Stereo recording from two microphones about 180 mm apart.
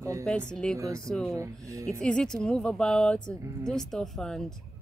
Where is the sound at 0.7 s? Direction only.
15° right (ahead or behind).